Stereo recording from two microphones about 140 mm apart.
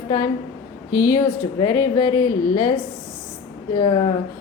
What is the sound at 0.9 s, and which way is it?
A woman's voice, 20° left (ahead or behind).